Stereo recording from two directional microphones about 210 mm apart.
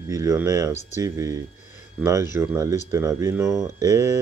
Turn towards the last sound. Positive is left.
turn(degrees=-15)  # may be behind; listen again after turning